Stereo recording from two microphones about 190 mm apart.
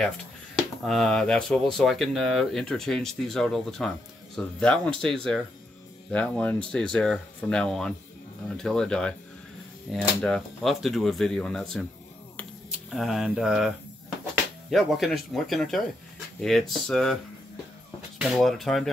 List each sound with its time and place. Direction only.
0.6 s speech: centre (ahead or behind)
12.9 s speech: centre (ahead or behind)
18.2 s speech: centre (ahead or behind)